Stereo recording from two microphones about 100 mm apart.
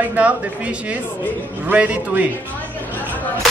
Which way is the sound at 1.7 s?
15° right (ahead or behind).